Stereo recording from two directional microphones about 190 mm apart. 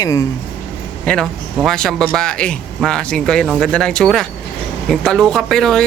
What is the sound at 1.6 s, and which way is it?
Speech, 5° left (ahead or behind).